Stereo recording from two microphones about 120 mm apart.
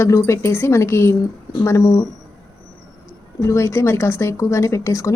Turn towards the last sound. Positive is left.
turn(degrees=25)  # may be behind; listen again after turning